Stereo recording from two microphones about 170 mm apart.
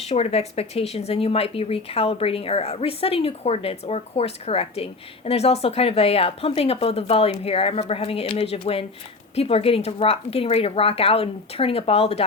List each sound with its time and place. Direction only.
0.0 s speech: 40° left (ahead or behind)